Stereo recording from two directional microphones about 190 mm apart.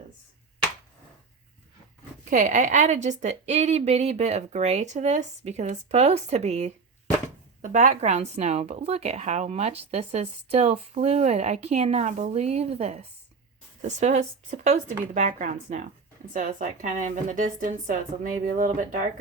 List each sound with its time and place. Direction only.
2.3 s speech: 40° right (ahead or behind)